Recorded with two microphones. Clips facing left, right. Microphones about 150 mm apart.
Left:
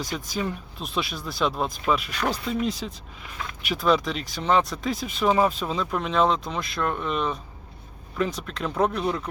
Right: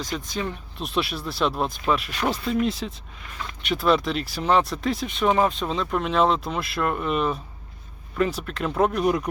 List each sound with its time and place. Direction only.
0.0 s speech: 5° left (ahead or behind); by 9.3 s 15° right (ahead or behind)